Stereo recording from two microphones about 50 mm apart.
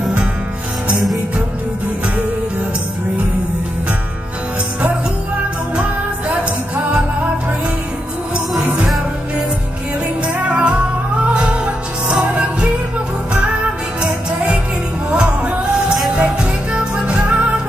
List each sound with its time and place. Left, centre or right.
5.8 s music: right
10.2 s music: right